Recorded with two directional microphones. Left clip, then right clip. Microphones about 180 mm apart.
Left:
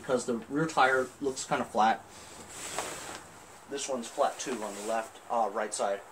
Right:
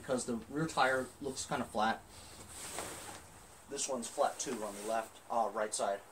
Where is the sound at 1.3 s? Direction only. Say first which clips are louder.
Left 5 dB; 25° left (ahead or behind).